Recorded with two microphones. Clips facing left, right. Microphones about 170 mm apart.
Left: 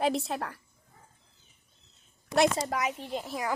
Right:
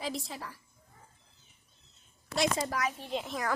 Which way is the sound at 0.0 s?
65° left (ahead or behind).